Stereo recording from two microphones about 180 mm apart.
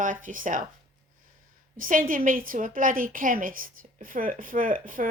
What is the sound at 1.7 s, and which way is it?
A woman's voice, 50° right (ahead or behind).